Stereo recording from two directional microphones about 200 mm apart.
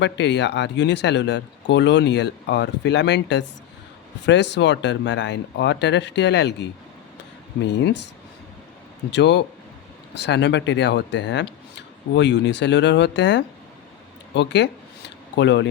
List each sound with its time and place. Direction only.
0.0 s speech: 60° left (ahead or behind)
7.7 s speech: 60° left (ahead or behind)
9.1 s speech: 60° left (ahead or behind)